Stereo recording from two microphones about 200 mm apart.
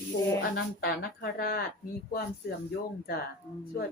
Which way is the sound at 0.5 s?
50° left (ahead or behind).